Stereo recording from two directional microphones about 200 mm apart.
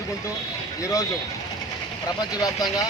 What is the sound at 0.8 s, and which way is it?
Speech, 15° left (ahead or behind).